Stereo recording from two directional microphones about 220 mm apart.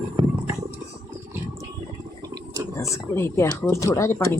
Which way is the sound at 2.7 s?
15° left (ahead or behind).